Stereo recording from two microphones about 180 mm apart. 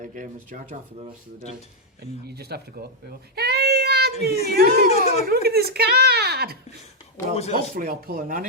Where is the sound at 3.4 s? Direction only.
60° right (ahead or behind).